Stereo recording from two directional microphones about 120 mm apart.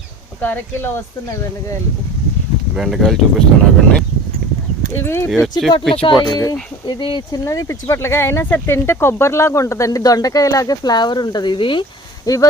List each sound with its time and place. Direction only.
0.4 s speech: 20° left (ahead or behind)
2.7 s speech: 5° right (ahead or behind)
5.0 s speech: 20° left (ahead or behind)
5.3 s speech: centre (ahead or behind)
5.9 s speech: 50° left (ahead or behind)
6.2 s speech: 30° left (ahead or behind)
7.0 s speech: 40° left (ahead or behind)
7.4 s speech: 25° left (ahead or behind); by 11.9 s 45° left (ahead or behind)
12.2 s speech: 30° left (ahead or behind)